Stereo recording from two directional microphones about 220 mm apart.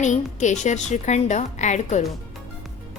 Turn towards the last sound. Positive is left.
turn(degrees=30)  # may be behind; listen again after turning